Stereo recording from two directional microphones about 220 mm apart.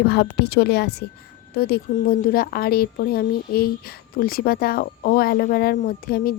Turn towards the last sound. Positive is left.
turn(degrees=40)  # may be behind; listen again after turning